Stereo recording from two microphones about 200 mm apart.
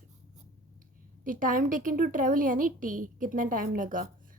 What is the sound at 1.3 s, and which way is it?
A woman's voice, 40° right (ahead or behind).